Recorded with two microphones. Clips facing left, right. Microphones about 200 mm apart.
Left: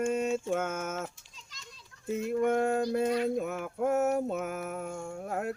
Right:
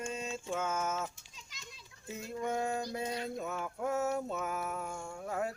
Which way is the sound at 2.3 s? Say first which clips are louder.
Left 8 dB; 65° left (ahead or behind).